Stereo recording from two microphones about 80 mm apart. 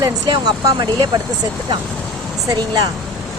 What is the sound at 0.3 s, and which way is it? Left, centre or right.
Speech, right.